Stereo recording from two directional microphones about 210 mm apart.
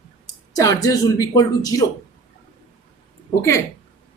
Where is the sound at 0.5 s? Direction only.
15° left (ahead or behind).